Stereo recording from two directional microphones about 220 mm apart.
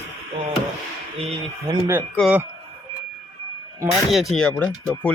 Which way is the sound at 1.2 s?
15° right (ahead or behind).